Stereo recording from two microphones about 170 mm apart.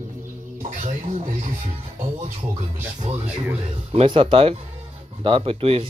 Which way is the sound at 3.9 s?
35° right (ahead or behind).